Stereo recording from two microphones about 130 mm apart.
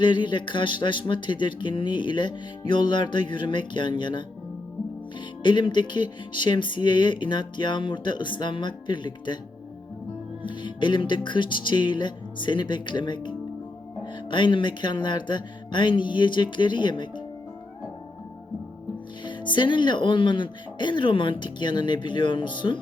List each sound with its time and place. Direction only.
0.0 s speech: 35° left (ahead or behind)
5.4 s speech: 35° left (ahead or behind)
10.4 s speech: 35° left (ahead or behind)
19.2 s speech: 35° left (ahead or behind)